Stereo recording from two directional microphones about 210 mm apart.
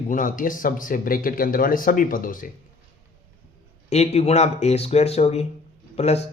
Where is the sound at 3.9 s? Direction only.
30° left (ahead or behind).